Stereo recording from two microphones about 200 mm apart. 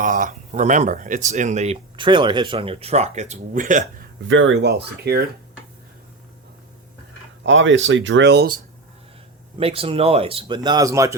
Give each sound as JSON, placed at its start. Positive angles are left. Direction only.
{"t": 0.0, "sound": "speech", "side_deg": -40}
{"t": 4.2, "sound": "speech", "side_deg": -70}
{"t": 7.4, "sound": "speech", "side_deg": -70}
{"t": 9.6, "sound": "speech", "side_deg": -30}